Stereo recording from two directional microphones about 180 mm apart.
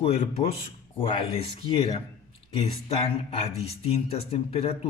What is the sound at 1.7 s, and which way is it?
Speech, 30° left (ahead or behind).